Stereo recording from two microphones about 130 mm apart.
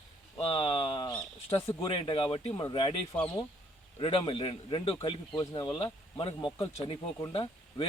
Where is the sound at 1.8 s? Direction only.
40° left (ahead or behind).